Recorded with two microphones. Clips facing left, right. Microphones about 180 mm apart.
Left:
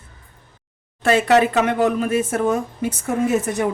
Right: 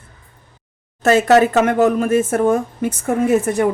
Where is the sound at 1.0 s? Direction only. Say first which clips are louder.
Right 3 dB; 45° right (ahead or behind).